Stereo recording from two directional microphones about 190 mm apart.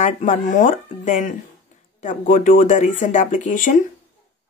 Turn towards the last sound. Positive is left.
turn(degrees=40)  # may be behind; listen again after turning